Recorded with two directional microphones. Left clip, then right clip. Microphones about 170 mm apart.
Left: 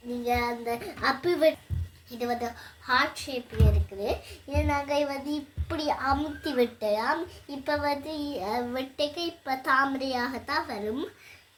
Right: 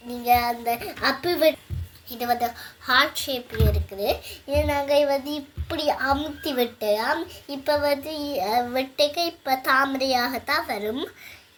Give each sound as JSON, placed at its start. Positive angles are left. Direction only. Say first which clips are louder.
{"t": 0.3, "sound": "a child's voice", "louder": "right 8 dB", "side_deg": -25}